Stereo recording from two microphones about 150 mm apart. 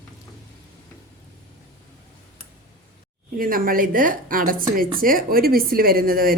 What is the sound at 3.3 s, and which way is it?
A woman's voice, 70° right (ahead or behind).